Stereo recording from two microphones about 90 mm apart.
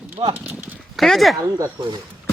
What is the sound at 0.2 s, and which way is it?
Speech, 65° right (ahead or behind).